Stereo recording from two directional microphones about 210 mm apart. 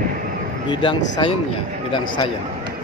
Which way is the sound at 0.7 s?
25° left (ahead or behind).